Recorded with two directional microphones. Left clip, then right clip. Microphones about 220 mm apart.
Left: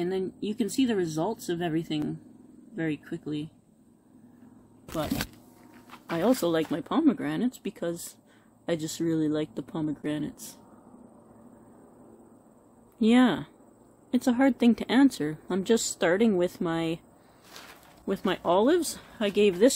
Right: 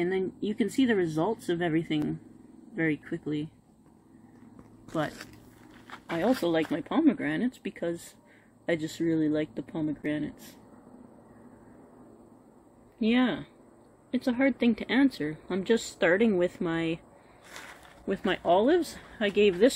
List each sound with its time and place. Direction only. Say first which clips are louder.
0.0 s speech: right 1 dB; 5° left (ahead or behind)
6.1 s speech: left 1 dB; 20° left (ahead or behind)
13.0 s speech: left 4 dB; 25° left (ahead or behind)
17.6 s a sound: right 2 dB; 10° right (ahead or behind)
18.0 s speech: even; 15° left (ahead or behind)